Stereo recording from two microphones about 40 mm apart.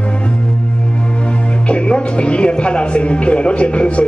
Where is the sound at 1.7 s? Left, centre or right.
Left.